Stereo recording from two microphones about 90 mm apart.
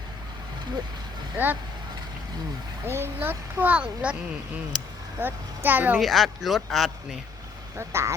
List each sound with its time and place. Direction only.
1.4 s a child's voice: 20° right (ahead or behind)
2.8 s a child's voice: 25° right (ahead or behind)
6.0 s speech: centre (ahead or behind)
7.8 s speech: 30° right (ahead or behind)